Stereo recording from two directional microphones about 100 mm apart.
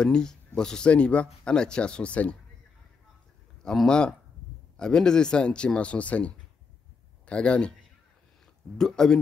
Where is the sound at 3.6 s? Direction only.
5° left (ahead or behind).